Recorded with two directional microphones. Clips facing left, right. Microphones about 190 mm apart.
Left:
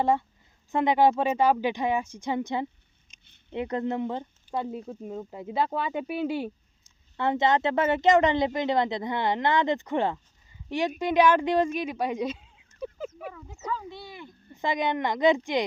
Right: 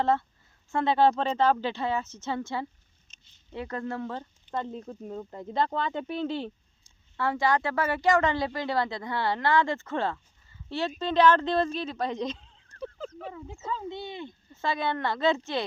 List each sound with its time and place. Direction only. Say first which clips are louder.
0.0 s speech: left 1 dB; 15° left (ahead or behind)
3.1 s a sound: left 1 dB; 10° left (ahead or behind)
3.5 s speech: left 5 dB; 20° left (ahead or behind)
7.2 s speech: left 2 dB; 20° left (ahead or behind)
13.7 s speech: even; 20° right (ahead or behind)
14.5 s speech: left 3 dB; 15° left (ahead or behind)